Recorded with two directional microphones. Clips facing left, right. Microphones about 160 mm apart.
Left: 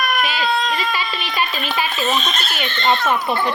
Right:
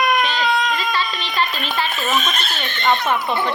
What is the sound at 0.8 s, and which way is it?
A child's voice, 10° left (ahead or behind).